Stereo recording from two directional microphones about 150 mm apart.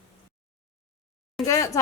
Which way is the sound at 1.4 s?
20° left (ahead or behind).